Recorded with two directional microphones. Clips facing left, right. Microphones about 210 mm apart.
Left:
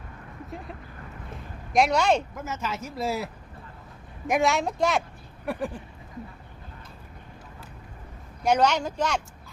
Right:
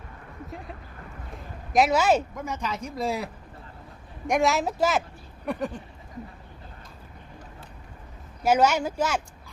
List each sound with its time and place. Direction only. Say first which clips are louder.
0.5 s speech: left 3 dB; centre (ahead or behind)
4.3 s speech: even; centre (ahead or behind)
5.5 s a sound: right 1 dB; 5° left (ahead or behind)
8.4 s speech: right 1 dB; 5° right (ahead or behind)